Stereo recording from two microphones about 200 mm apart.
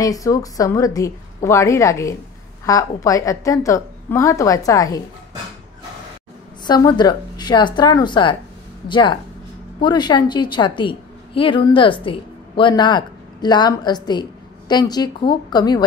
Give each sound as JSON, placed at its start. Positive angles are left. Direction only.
{"t": 0.0, "sound": "a woman's voice", "side_deg": 15}
{"t": 6.6, "sound": "a woman's voice", "side_deg": 20}